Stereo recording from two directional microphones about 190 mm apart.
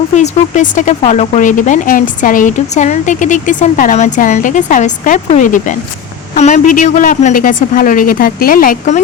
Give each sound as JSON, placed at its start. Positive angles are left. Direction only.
{"t": 0.1, "sound": "a woman's voice", "side_deg": 40}